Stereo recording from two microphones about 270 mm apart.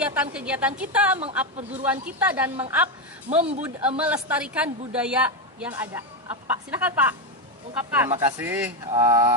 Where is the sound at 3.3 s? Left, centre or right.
Right.